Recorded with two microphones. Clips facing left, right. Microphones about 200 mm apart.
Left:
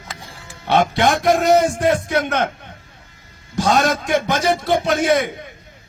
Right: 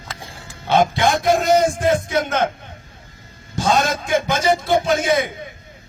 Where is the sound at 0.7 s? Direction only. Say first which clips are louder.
Even; 65° left (ahead or behind).